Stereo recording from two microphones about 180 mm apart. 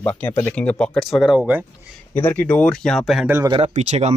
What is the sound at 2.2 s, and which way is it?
Speech, 10° left (ahead or behind).